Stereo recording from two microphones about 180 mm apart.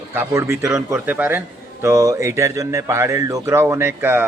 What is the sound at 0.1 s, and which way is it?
Speech, 15° right (ahead or behind).